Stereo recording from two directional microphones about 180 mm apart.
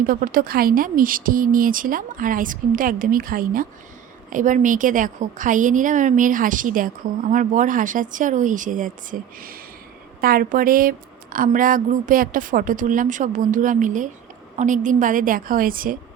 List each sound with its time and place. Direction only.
0.0 s a woman's voice: 50° right (ahead or behind)